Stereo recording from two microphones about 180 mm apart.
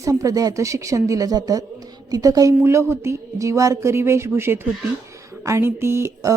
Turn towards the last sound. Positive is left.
turn(degrees=-15)  # may be behind; listen again after turning